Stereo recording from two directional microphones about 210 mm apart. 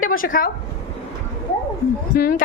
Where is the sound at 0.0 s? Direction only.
40° left (ahead or behind).